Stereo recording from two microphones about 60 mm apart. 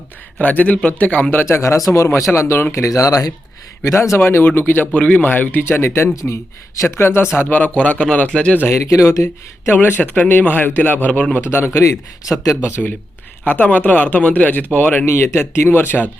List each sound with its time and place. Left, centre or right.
0.3 s a man's voice: left
1.5 s speech: left
3.9 s speech: left
4.2 s speech: left
6.1 s speech: left
7.3 s a man's voice: left
8.7 s speech: left
10.0 s a man's voice: left
11.3 s speech: left
13.5 s a man's voice: left
15.0 s speech: left